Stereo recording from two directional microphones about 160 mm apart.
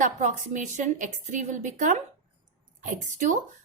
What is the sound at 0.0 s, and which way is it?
Speech, 50° right (ahead or behind).